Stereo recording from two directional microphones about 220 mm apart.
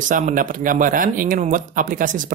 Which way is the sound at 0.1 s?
35° right (ahead or behind).